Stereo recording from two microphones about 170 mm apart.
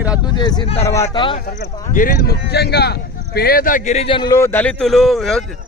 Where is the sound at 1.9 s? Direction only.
55° left (ahead or behind); by 2.9 s 75° left (ahead or behind).